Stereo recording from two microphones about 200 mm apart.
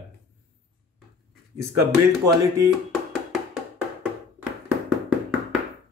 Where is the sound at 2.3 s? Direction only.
15° right (ahead or behind).